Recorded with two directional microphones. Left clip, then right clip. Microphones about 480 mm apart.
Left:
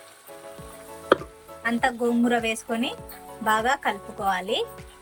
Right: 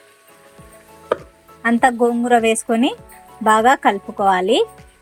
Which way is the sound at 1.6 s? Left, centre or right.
Centre.